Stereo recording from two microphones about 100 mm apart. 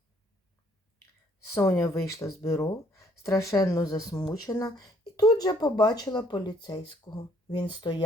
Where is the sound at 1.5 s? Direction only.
25° left (ahead or behind).